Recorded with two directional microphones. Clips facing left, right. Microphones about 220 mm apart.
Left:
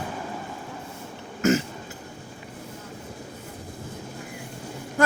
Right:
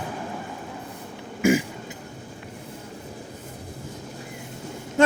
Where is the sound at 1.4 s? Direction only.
10° right (ahead or behind).